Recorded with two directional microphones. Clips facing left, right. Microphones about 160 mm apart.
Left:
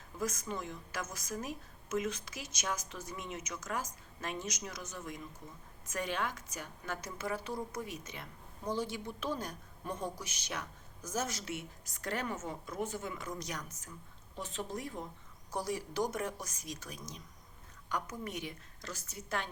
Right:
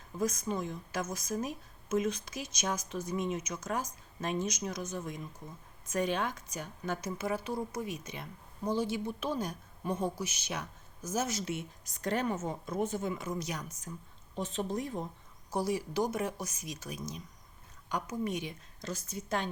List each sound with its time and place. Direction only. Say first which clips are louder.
0.2 s a woman's voice: right 5 dB; 20° right (ahead or behind)
13.2 s a woman's voice: right 4 dB; 10° right (ahead or behind)
14.3 s a woman's voice: right 6 dB; 25° right (ahead or behind)
15.5 s a woman's voice: right 4 dB; 5° right (ahead or behind)